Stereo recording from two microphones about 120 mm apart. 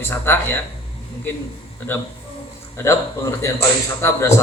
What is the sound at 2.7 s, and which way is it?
A man's voice, 25° left (ahead or behind).